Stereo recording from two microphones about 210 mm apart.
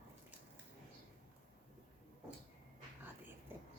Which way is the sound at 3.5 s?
10° right (ahead or behind).